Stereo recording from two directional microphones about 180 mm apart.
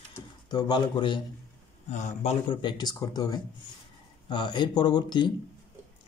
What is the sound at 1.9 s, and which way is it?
Speech, 40° left (ahead or behind).